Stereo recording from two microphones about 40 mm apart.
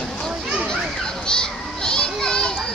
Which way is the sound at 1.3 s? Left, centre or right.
Centre.